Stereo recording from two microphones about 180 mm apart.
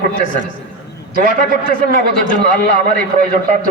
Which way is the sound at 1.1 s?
55° right (ahead or behind).